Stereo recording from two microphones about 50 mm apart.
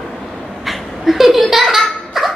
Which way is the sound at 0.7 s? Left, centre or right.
Centre.